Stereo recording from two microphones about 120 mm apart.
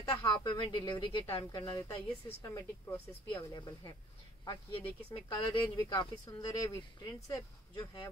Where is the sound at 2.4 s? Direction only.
25° left (ahead or behind).